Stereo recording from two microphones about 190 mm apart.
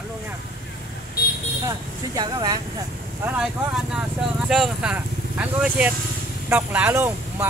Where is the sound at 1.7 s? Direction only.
20° right (ahead or behind).